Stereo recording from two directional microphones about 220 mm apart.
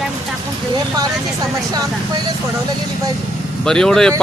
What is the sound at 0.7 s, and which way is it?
A man's voice, 15° right (ahead or behind).